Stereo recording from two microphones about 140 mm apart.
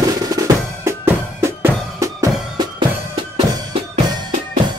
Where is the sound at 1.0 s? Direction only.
15° right (ahead or behind).